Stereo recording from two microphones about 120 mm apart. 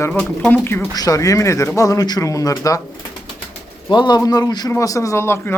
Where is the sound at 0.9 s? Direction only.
30° left (ahead or behind).